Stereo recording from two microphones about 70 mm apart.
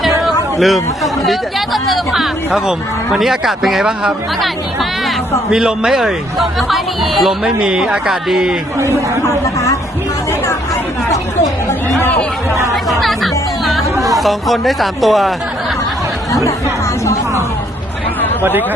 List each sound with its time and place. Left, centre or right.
0.3 s speech: centre
12.5 s speech: right
12.7 s music: centre